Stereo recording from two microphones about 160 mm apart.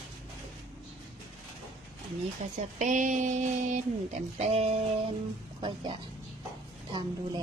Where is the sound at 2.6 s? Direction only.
50° right (ahead or behind).